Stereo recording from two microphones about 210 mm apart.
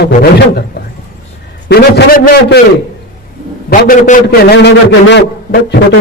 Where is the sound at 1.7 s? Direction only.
50° left (ahead or behind).